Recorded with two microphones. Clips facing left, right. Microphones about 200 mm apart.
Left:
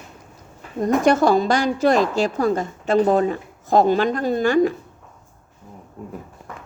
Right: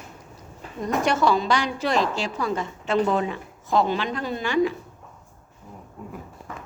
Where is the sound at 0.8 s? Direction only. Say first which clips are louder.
Left 6 dB; 50° left (ahead or behind).